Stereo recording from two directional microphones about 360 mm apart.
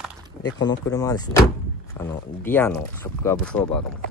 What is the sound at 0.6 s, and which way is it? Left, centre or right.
Speech, centre.